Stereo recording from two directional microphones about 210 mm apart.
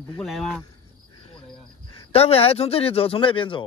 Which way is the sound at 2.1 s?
30° left (ahead or behind).